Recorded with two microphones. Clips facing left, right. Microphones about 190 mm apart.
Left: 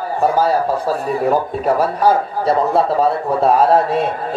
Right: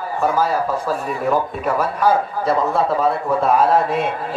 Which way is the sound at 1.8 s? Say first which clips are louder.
Even; 30° left (ahead or behind).